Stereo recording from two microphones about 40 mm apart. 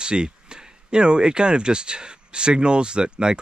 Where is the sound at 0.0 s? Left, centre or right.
Right.